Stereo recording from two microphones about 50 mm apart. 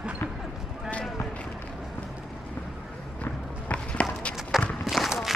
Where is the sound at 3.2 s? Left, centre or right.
Left.